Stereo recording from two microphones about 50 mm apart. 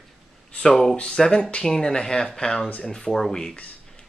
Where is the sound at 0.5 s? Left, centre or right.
Centre.